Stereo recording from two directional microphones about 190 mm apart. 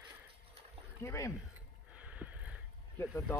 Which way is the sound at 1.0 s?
15° left (ahead or behind).